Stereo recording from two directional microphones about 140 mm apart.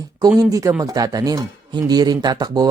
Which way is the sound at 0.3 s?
25° right (ahead or behind).